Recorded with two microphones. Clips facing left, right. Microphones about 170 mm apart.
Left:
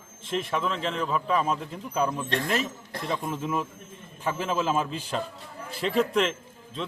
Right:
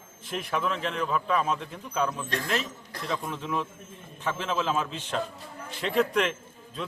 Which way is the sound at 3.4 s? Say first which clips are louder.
Left 2 dB; 5° left (ahead or behind).